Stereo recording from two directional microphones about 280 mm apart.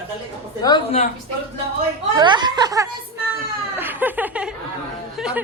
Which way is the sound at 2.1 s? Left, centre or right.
Centre.